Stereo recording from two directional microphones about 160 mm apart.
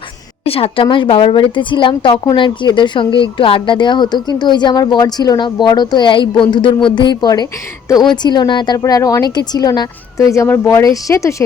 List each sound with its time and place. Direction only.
0.4 s speech: 35° left (ahead or behind); by 11.4 s 20° left (ahead or behind)